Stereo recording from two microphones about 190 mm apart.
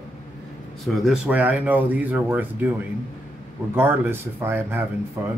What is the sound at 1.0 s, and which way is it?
Speech, 5° right (ahead or behind).